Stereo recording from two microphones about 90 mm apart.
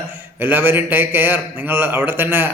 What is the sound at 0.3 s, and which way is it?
A man's voice, 20° right (ahead or behind).